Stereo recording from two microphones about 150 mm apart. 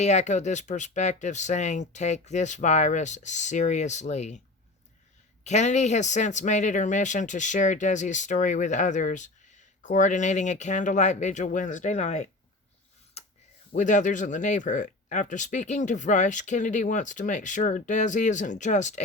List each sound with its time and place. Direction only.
0.0 s speech: 50° left (ahead or behind)
5.5 s speech: 50° left (ahead or behind)
13.2 s a sound: 45° left (ahead or behind)
13.7 s speech: 55° left (ahead or behind)